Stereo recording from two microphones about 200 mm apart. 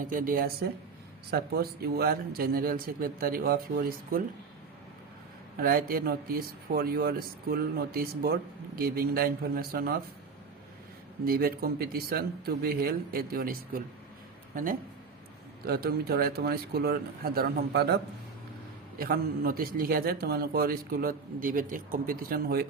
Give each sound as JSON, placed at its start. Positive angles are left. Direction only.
{"t": 0.0, "sound": "speech", "side_deg": -45}
{"t": 5.5, "sound": "speech", "side_deg": -45}
{"t": 11.3, "sound": "speech", "side_deg": -50}